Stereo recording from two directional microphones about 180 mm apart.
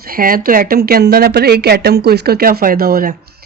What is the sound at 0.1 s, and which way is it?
Speech, 55° right (ahead or behind).